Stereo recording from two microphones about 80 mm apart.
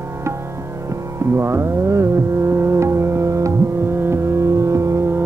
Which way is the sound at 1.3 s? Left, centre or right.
Right.